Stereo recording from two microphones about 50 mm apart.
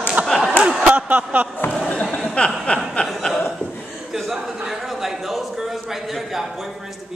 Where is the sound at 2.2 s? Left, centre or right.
Left.